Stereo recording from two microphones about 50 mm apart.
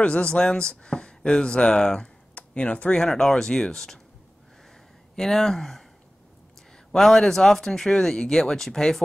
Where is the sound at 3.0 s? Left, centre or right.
Centre.